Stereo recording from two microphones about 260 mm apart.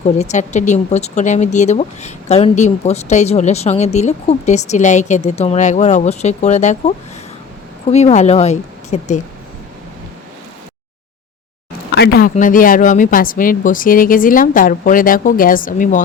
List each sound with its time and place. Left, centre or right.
0.0 s speech: left
11.9 s speech: left